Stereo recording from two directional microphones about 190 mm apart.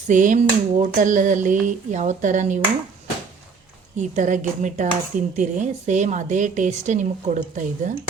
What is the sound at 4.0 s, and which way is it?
Speech, 40° right (ahead or behind).